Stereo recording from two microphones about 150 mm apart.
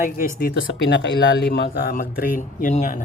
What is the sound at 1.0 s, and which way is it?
Speech, 90° left.